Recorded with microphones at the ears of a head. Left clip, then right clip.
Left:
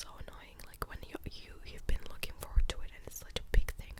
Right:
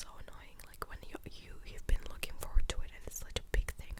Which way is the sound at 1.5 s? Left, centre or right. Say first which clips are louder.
Left 1 dB; centre.